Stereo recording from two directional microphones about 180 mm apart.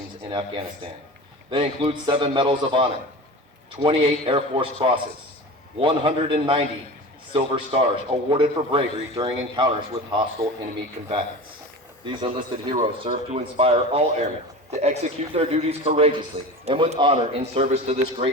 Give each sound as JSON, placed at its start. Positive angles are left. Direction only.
{"t": 0.3, "sound": "a man's voice", "side_deg": -25}
{"t": 12.1, "sound": "a man's voice", "side_deg": -30}